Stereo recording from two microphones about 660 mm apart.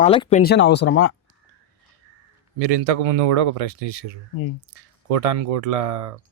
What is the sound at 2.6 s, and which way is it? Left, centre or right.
A man's voice, right.